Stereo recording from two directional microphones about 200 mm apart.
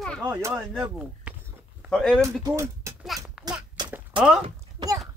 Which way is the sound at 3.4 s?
Centre (ahead or behind).